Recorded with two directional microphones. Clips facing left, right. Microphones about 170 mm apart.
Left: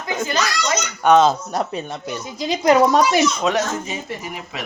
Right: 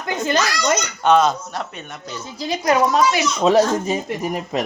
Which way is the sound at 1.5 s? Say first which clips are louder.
Left 6 dB; 40° left (ahead or behind).